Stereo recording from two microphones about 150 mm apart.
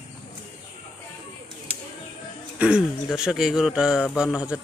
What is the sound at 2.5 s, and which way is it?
Speech, 5° right (ahead or behind).